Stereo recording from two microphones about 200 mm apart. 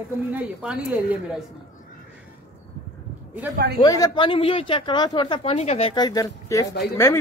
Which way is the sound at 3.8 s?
20° left (ahead or behind).